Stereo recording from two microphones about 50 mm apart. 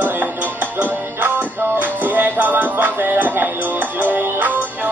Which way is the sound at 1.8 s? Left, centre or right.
Right.